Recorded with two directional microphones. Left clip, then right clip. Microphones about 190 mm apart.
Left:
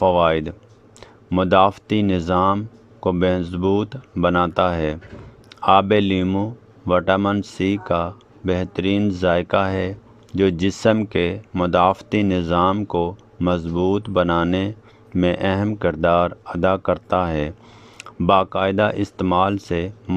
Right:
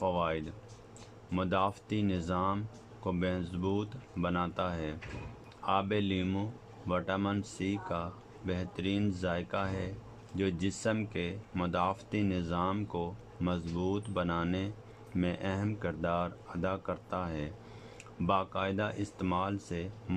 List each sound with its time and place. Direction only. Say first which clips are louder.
0.0 s speech: left 16 dB; 50° left (ahead or behind)